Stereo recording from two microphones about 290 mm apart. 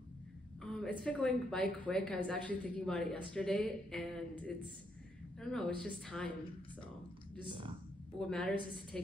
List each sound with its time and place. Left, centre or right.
0.6 s a woman's voice: centre
7.3 s speech: centre
8.2 s a woman's voice: centre